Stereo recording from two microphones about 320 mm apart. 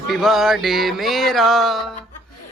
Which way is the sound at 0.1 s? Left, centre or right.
Centre.